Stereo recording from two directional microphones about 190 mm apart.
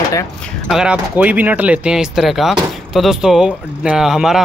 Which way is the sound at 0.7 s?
5° right (ahead or behind).